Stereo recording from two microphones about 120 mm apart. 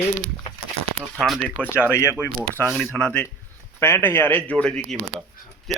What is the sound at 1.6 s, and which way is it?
Speech, 15° left (ahead or behind).